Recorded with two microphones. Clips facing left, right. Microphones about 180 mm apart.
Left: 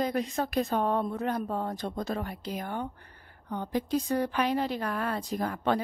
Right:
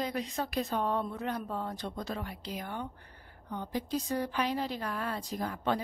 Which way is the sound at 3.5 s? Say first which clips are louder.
Left 5 dB; 60° left (ahead or behind).